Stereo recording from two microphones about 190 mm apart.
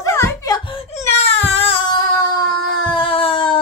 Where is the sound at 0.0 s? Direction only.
15° left (ahead or behind).